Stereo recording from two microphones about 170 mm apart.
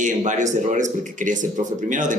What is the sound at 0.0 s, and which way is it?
A man's voice, 45° right (ahead or behind).